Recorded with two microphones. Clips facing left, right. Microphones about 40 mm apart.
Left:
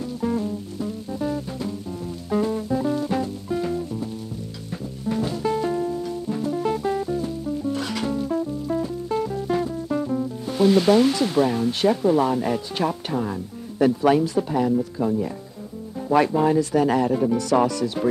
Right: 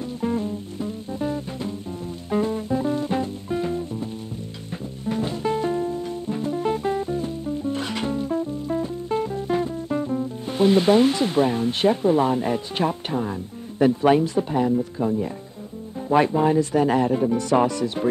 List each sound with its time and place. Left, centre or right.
0.0 s music: right
10.4 s speech: right